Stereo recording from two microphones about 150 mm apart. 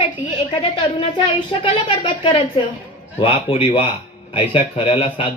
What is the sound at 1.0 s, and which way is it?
Speech, 35° left (ahead or behind).